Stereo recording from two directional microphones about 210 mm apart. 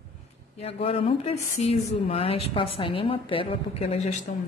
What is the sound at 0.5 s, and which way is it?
A woman's voice, 30° left (ahead or behind).